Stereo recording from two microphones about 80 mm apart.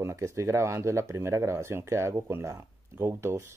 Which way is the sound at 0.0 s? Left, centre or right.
Right.